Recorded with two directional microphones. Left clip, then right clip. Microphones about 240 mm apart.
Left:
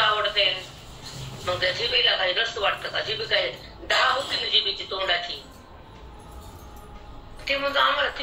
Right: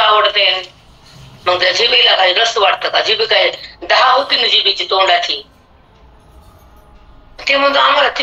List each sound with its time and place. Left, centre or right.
0.0 s a sound: right
1.4 s a man's voice: right
7.3 s a man's voice: right